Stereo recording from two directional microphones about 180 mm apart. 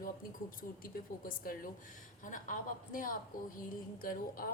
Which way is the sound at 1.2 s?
50° left (ahead or behind).